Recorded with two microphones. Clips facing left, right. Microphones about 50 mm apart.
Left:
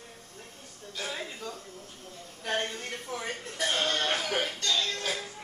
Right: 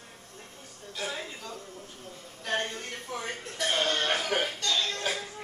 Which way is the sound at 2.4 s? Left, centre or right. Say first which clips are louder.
Even; centre.